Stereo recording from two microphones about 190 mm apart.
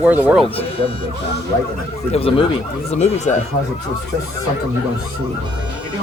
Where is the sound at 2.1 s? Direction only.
30° left (ahead or behind).